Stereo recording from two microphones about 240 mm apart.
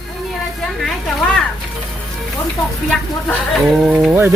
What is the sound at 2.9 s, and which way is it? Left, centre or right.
Speech, centre.